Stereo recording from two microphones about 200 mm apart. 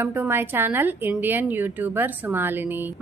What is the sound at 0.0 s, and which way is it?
A woman's voice, 10° right (ahead or behind).